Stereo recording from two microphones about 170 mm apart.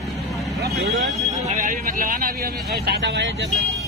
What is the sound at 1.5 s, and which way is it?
A man's voice, 55° right (ahead or behind).